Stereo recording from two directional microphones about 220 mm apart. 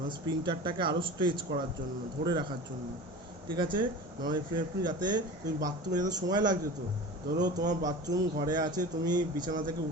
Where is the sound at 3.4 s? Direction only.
20° right (ahead or behind).